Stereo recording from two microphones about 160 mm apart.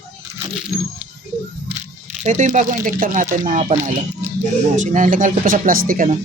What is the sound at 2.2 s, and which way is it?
Speech, 45° right (ahead or behind).